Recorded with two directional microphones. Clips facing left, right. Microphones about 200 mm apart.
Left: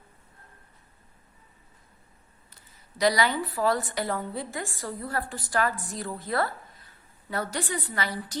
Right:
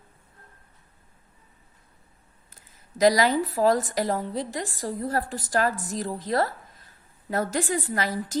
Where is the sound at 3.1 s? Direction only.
40° right (ahead or behind).